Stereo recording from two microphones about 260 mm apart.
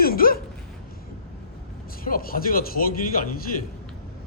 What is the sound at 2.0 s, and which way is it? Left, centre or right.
Speech, left.